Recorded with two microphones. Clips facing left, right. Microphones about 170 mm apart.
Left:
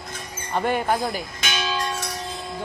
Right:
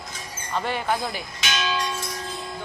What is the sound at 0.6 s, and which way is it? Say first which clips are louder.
Speech: left 4 dB; 50° left (ahead or behind).